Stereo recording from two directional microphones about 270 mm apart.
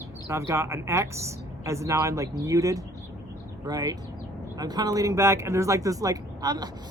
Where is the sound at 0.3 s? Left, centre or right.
Centre.